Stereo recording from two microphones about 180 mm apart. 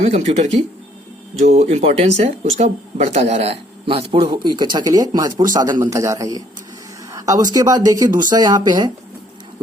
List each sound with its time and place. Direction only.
0.0 s speech: 40° right (ahead or behind); by 8.9 s 20° right (ahead or behind)